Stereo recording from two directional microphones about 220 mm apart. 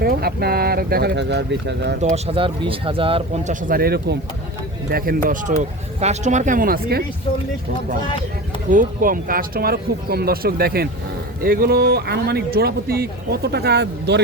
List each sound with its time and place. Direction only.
0.0 s speech: 45° right (ahead or behind)
2.0 s speech: 30° right (ahead or behind)
8.7 s speech: 35° right (ahead or behind)